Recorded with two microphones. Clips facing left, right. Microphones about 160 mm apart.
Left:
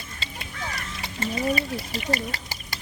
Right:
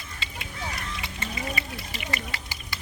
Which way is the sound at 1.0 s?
35° left (ahead or behind).